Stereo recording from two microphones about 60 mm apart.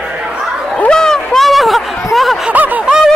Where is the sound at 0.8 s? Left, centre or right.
Centre.